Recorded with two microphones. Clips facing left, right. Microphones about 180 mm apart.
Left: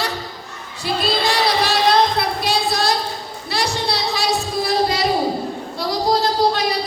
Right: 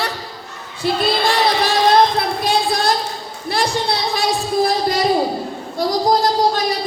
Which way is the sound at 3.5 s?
55° right (ahead or behind).